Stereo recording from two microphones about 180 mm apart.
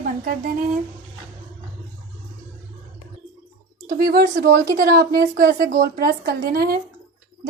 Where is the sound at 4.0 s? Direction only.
65° right (ahead or behind).